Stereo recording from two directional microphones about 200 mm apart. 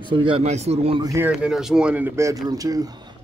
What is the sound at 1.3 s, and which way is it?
Speech, 5° right (ahead or behind).